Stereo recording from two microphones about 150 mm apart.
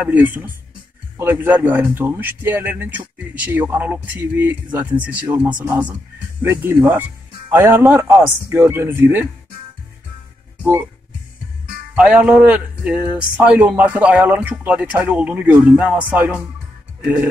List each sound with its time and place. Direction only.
0.0 s speech: 10° right (ahead or behind)
11.9 s speech: 5° right (ahead or behind)